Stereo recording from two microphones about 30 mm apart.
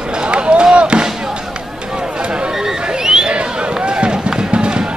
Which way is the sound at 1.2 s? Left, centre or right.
Right.